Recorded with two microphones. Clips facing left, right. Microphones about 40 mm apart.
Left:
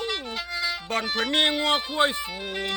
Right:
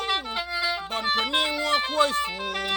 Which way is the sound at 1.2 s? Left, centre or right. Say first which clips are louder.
Left 2 dB; left.